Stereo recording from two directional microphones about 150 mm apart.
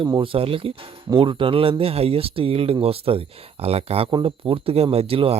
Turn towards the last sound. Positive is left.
turn(degrees=-40)  # may be behind; listen again after turning